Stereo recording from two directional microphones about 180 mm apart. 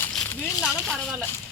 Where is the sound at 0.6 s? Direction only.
Centre (ahead or behind).